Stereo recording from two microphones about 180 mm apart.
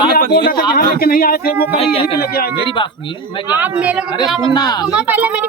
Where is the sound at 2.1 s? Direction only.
60° left (ahead or behind).